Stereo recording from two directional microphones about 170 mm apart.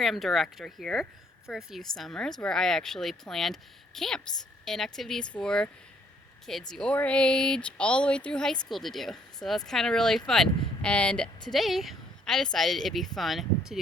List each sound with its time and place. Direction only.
0.0 s speech: centre (ahead or behind)